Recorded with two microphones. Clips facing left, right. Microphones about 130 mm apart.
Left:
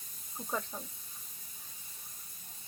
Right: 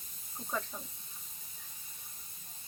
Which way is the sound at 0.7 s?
25° left (ahead or behind).